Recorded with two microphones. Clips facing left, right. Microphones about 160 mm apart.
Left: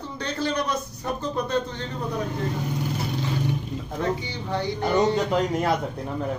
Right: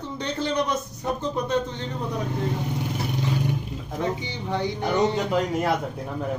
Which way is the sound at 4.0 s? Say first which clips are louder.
Even; 15° right (ahead or behind).